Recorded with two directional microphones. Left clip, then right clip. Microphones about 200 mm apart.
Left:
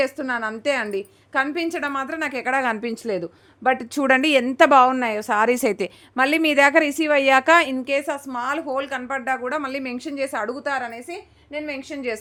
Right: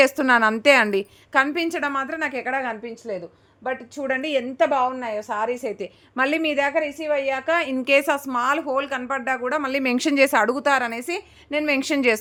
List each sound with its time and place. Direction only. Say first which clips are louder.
0.0 s a woman's voice: right 7 dB; 30° right (ahead or behind); by 2.5 s 10° left (ahead or behind)
2.5 s a woman's voice: left 7 dB; 25° left (ahead or behind)
2.8 s a woman's voice: left 5 dB; 50° left (ahead or behind)
6.1 s a woman's voice: left 3 dB; 5° left (ahead or behind)
6.7 s a woman's voice: left 5 dB; 50° left (ahead or behind)
7.9 s a woman's voice: right 5 dB; 20° right (ahead or behind)
9.9 s a woman's voice: right 8 dB; 30° right (ahead or behind)
11.5 s a woman's voice: right 8 dB; 60° right (ahead or behind)